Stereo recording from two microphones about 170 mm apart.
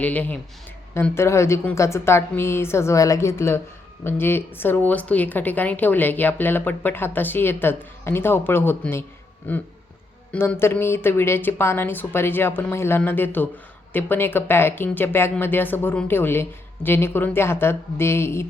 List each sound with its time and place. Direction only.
0.0 s speech: 10° left (ahead or behind)